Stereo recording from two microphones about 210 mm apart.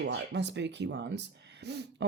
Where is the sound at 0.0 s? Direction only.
55° right (ahead or behind).